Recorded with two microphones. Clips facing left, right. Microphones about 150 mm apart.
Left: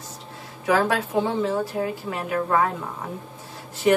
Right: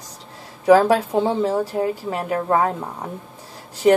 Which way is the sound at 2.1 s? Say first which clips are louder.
Right 1 dB; 35° right (ahead or behind).